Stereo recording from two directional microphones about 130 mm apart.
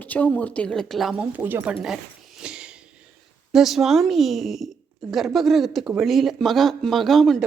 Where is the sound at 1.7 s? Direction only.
5° right (ahead or behind).